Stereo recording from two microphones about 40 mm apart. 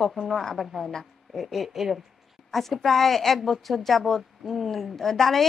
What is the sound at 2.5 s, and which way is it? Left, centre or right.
A woman's voice, centre.